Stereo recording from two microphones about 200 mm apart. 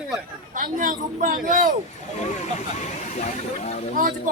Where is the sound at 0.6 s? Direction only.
40° right (ahead or behind).